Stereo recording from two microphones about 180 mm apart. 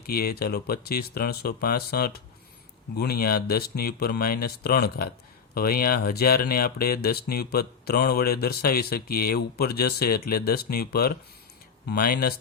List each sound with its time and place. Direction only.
0.0 s speech: 55° left (ahead or behind)